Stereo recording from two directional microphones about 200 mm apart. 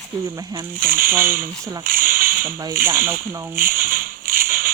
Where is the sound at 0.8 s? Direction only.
45° right (ahead or behind).